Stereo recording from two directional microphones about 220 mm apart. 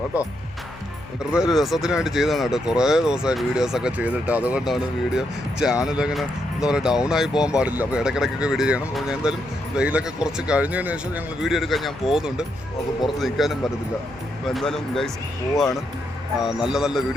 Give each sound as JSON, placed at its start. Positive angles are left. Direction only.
{"t": 1.3, "sound": "speech", "side_deg": 0}